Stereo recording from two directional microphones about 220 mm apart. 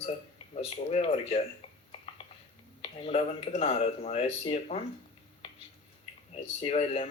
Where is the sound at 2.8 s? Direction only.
30° left (ahead or behind).